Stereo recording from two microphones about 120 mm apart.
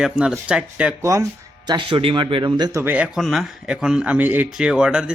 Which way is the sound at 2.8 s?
15° right (ahead or behind).